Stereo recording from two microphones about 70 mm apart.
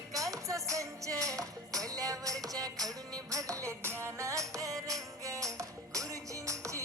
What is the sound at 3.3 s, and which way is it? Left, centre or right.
Music, right.